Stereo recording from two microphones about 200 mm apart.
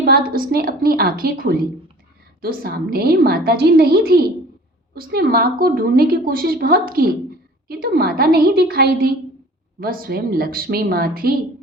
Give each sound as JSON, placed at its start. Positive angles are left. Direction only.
{"t": 0.0, "sound": "a woman's voice", "side_deg": -45}